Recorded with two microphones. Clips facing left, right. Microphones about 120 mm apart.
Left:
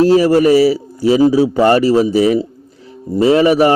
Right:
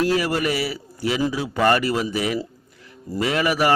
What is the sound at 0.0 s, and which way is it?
A man's voice, 30° left (ahead or behind).